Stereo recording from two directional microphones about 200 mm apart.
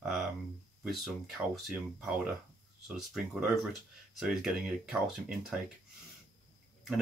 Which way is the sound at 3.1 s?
Centre (ahead or behind).